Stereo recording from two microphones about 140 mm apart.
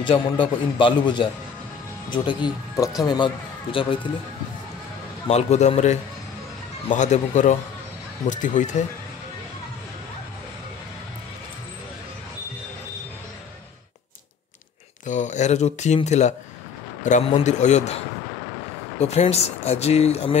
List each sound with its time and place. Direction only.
0.0 s a man's voice: 35° left (ahead or behind)
3.7 s a man's voice: 40° left (ahead or behind)
5.3 s speech: 50° left (ahead or behind)
15.0 s speech: 60° left (ahead or behind)
18.9 s speech: 50° left (ahead or behind)